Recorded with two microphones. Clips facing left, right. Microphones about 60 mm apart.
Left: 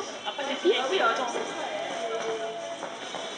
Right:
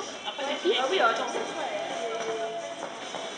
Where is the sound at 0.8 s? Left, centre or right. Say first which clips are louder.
Right 1 dB; centre.